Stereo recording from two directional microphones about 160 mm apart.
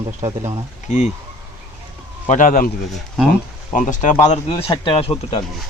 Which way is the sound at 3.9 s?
50° left (ahead or behind).